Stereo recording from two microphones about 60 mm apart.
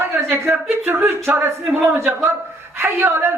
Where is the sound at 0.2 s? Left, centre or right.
Right.